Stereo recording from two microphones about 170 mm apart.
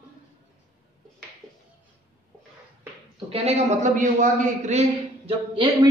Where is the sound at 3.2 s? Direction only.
35° right (ahead or behind).